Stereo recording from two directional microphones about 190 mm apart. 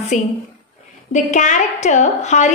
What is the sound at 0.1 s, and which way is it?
A woman's voice, 40° left (ahead or behind).